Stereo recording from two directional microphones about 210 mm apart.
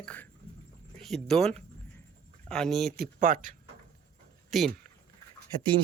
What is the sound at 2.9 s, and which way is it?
Speech, 40° right (ahead or behind).